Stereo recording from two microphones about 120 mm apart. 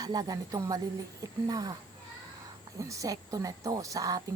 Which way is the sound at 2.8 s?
25° right (ahead or behind).